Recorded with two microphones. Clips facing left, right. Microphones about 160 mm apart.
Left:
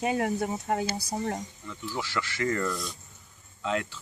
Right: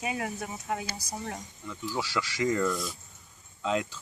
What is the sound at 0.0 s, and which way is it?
Speech, 35° left (ahead or behind).